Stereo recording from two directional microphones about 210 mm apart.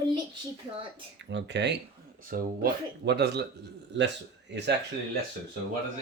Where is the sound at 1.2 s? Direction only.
55° right (ahead or behind).